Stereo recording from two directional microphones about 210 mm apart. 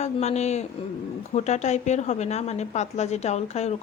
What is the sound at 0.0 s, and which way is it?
A woman's voice, 30° left (ahead or behind).